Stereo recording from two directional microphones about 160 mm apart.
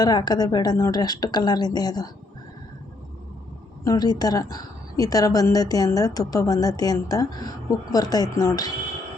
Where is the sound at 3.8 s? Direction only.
25° left (ahead or behind).